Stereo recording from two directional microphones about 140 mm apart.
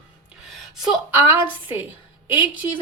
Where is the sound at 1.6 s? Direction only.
15° right (ahead or behind).